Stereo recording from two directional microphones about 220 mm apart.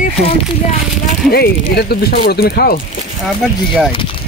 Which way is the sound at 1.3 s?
45° left (ahead or behind).